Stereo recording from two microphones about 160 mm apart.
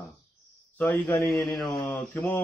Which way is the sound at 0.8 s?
15° left (ahead or behind).